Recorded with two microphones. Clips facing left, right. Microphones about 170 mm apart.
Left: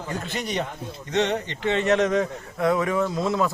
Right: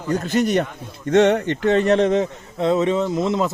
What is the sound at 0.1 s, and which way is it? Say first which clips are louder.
A man's voice: right 11 dB; 45° right (ahead or behind).